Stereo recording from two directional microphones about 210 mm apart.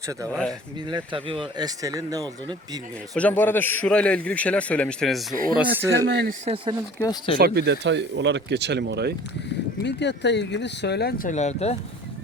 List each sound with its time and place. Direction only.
0.3 s a man's voice: 5° left (ahead or behind)
0.9 s speech: 25° right (ahead or behind)
3.2 s a man's voice: 10° left (ahead or behind)
5.3 s speech: 40° right (ahead or behind)
6.1 s speech: 55° right (ahead or behind)
6.4 s speech: 25° right (ahead or behind)
7.0 s speech: 20° left (ahead or behind)
7.3 s speech: 50° right (ahead or behind)
9.8 s speech: 55° left (ahead or behind)
11.3 s speech: 35° left (ahead or behind)